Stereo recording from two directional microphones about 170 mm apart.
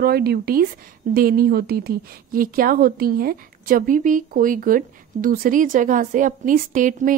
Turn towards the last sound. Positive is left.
turn(degrees=-50)  # may be behind; listen again after turning